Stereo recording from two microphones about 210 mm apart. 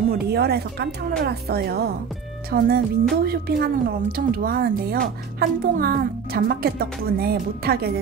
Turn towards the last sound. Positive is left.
turn(degrees=-45)  # may be behind; listen again after turning